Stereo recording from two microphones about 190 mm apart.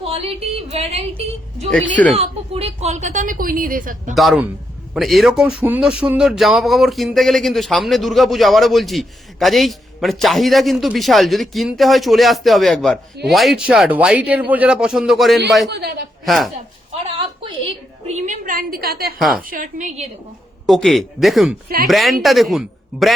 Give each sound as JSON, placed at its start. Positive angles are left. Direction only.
{"t": 0.0, "sound": "a sound", "side_deg": -30}
{"t": 0.7, "sound": "a woman's voice", "side_deg": -35}
{"t": 4.1, "sound": "speech", "side_deg": 0}
{"t": 15.7, "sound": "a woman's voice", "side_deg": -60}
{"t": 16.2, "sound": "a woman's voice", "side_deg": 0}
{"t": 17.2, "sound": "a woman's voice", "side_deg": -30}
{"t": 20.7, "sound": "speech", "side_deg": 0}